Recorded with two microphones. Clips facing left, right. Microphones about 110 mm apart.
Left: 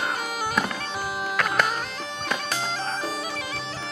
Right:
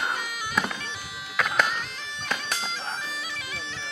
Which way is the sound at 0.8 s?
45° left (ahead or behind).